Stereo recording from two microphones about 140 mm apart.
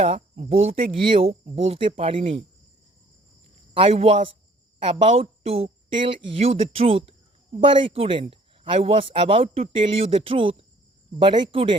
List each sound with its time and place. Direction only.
0.1 s speech: 45° right (ahead or behind)
3.8 s speech: 45° right (ahead or behind)